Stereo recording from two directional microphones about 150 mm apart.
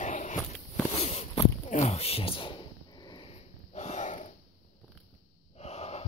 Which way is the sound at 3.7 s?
50° left (ahead or behind).